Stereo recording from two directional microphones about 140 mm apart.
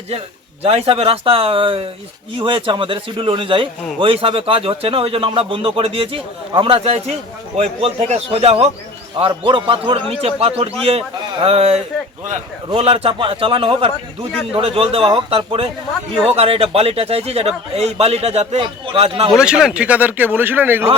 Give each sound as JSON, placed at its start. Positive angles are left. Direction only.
{"t": 0.6, "sound": "a man's voice", "side_deg": -45}
{"t": 19.3, "sound": "a man's voice", "side_deg": -5}